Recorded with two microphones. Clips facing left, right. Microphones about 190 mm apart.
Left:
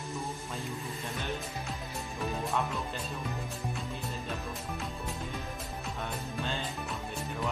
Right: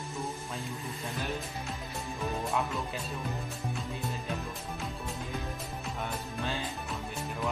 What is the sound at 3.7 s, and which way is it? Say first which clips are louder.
Music: right 1 dB; centre (ahead or behind).